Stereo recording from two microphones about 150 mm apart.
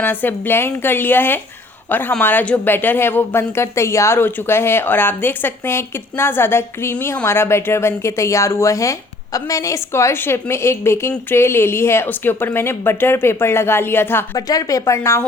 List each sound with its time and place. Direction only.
0.0 s speech: 10° left (ahead or behind)